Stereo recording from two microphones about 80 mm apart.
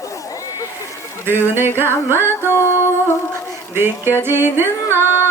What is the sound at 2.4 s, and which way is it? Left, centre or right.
Mantra, left.